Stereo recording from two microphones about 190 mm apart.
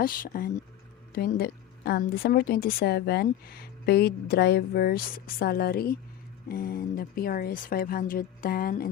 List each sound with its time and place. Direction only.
0.0 s a woman's voice: 50° left (ahead or behind)